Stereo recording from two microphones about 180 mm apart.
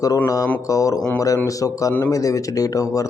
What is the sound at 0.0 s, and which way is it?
A man's voice, 20° left (ahead or behind).